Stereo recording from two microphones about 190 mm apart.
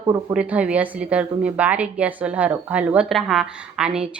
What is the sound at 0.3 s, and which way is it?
A woman's voice, 5° right (ahead or behind).